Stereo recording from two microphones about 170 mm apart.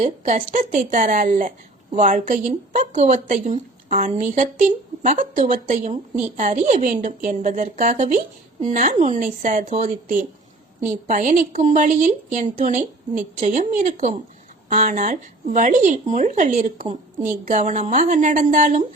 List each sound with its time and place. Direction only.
0.0 s a woman's voice: 45° right (ahead or behind)
16.8 s a woman's voice: 35° right (ahead or behind)